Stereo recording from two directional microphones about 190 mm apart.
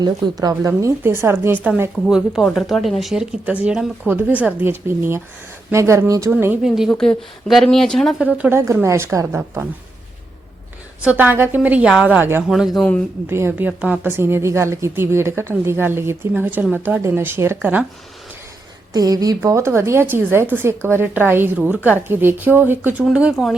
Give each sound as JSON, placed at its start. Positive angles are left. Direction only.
{"t": 0.0, "sound": "a woman's voice", "side_deg": -20}
{"t": 11.0, "sound": "a woman's voice", "side_deg": -10}
{"t": 13.2, "sound": "a woman's voice", "side_deg": -10}
{"t": 18.9, "sound": "a woman's voice", "side_deg": -20}